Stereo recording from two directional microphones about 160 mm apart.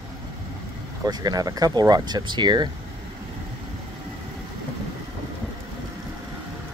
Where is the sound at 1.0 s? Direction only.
25° right (ahead or behind).